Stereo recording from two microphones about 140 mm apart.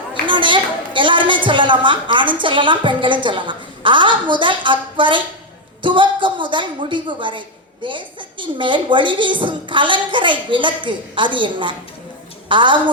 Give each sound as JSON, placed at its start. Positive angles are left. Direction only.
{"t": 0.1, "sound": "a woman's voice", "side_deg": -35}